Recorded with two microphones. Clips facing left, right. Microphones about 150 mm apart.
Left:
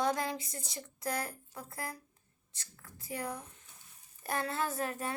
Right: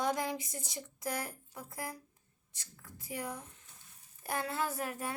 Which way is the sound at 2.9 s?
20° right (ahead or behind).